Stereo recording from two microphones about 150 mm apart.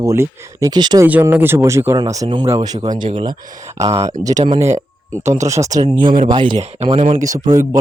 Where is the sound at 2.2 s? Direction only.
35° right (ahead or behind).